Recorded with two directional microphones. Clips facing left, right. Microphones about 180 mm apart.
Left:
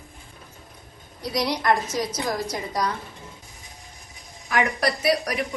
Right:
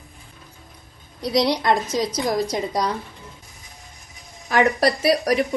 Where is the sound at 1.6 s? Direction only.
25° right (ahead or behind).